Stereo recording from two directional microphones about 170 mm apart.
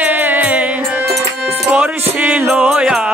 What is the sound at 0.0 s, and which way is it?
Music, 10° right (ahead or behind).